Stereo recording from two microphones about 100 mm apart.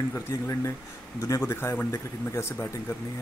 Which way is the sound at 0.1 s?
30° left (ahead or behind).